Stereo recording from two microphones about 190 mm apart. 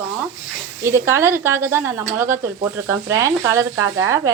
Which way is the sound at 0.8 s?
15° right (ahead or behind).